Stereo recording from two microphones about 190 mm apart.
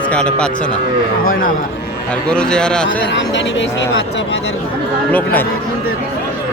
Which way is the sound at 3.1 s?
75° left (ahead or behind).